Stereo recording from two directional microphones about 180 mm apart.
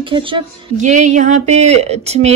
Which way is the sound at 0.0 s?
30° right (ahead or behind).